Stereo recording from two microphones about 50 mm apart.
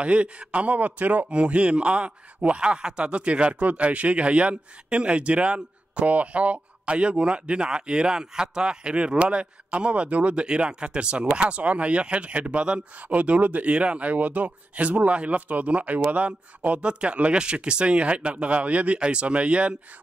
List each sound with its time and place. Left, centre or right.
0.0 s speech: right